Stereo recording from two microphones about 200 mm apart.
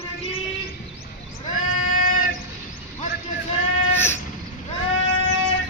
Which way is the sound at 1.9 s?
45° left (ahead or behind).